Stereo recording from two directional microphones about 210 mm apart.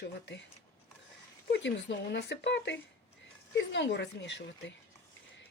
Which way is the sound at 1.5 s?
55° left (ahead or behind).